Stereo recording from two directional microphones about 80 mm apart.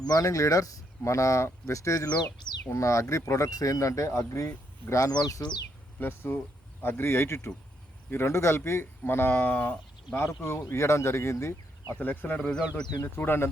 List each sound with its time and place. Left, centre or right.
0.0 s speech: left
5.1 s speech: left
6.0 s speech: left
10.2 s speech: left
11.9 s speech: left
12.4 s a man's voice: centre
13.0 s speech: left